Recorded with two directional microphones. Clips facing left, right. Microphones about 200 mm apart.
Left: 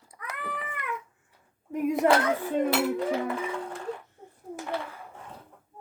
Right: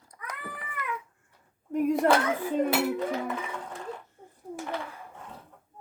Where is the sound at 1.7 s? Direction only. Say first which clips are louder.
Right 2 dB; centre (ahead or behind).